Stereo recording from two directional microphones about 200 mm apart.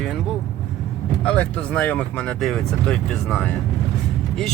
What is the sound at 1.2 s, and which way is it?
Speech, 5° left (ahead or behind).